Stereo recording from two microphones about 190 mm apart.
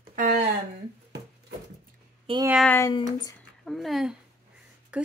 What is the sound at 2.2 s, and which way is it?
Speech, 25° right (ahead or behind).